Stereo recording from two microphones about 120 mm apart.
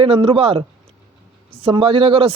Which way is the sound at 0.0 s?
50° right (ahead or behind).